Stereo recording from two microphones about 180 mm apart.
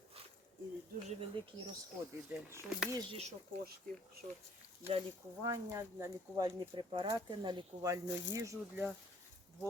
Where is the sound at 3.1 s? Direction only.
35° right (ahead or behind).